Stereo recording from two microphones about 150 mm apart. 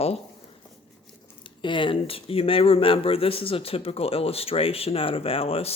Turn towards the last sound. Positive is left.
turn(degrees=40)  # may be behind; listen again after turning